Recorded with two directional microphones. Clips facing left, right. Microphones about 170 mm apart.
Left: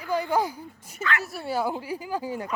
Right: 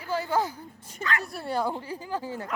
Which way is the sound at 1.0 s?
35° right (ahead or behind).